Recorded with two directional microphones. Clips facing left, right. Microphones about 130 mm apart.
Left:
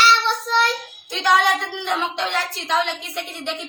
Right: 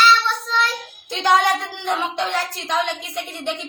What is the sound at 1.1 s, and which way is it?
Speech, 15° right (ahead or behind).